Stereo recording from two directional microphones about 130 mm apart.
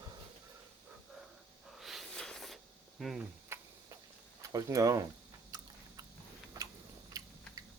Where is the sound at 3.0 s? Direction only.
Centre (ahead or behind).